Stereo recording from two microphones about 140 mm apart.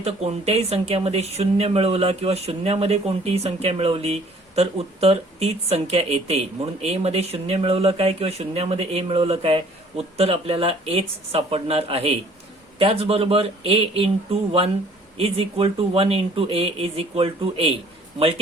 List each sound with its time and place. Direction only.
0.0 s speech: 45° right (ahead or behind)
15.2 s speech: 40° right (ahead or behind)